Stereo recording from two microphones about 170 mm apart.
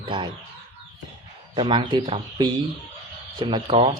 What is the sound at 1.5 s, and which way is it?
Speech, 30° right (ahead or behind).